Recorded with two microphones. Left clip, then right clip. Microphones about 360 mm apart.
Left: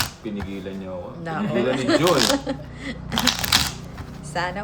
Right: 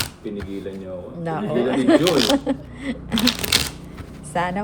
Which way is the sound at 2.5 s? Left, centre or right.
Centre.